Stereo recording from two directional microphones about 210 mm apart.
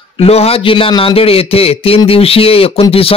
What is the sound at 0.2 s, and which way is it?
A man's voice, 30° left (ahead or behind).